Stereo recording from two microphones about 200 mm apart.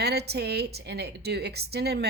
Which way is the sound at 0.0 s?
55° right (ahead or behind).